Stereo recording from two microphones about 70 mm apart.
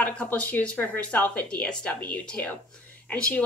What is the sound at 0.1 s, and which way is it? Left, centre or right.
Speech, centre.